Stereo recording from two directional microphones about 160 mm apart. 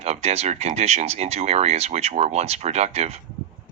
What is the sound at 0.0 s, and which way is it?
Speech, 40° right (ahead or behind).